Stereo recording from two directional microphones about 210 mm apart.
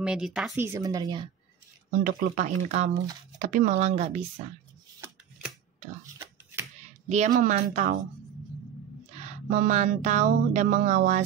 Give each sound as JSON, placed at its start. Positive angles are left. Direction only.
{"t": 0.0, "sound": "speech", "side_deg": -5}
{"t": 0.6, "sound": "speech", "side_deg": -15}
{"t": 2.0, "sound": "speech", "side_deg": -35}
{"t": 7.1, "sound": "speech", "side_deg": -35}
{"t": 9.5, "sound": "speech", "side_deg": -35}